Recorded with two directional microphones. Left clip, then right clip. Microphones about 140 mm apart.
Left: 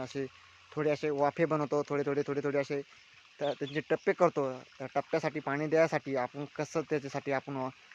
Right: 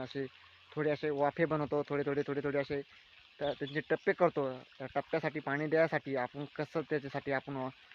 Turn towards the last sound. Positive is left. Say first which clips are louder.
# left 2 dB
turn(degrees=0)  # may be behind; listen again after turning